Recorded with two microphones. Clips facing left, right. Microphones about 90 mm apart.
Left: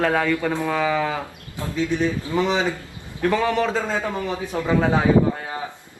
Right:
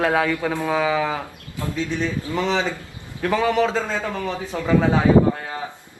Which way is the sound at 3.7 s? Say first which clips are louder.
Even; 15° left (ahead or behind).